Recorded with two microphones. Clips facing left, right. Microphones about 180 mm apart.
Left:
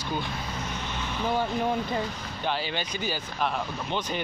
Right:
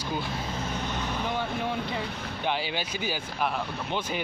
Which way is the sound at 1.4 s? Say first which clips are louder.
Left 3 dB; 45° left (ahead or behind).